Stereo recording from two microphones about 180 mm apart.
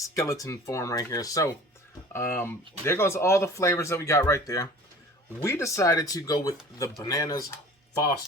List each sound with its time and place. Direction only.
0.0 s speech: 20° left (ahead or behind)